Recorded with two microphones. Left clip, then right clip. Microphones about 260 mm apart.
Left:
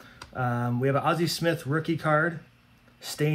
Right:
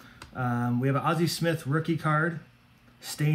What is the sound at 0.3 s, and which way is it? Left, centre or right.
Speech, centre.